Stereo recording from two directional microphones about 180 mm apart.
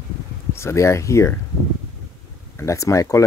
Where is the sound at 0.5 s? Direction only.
15° left (ahead or behind).